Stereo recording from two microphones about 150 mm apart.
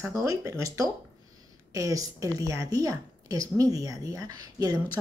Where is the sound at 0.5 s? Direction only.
20° right (ahead or behind).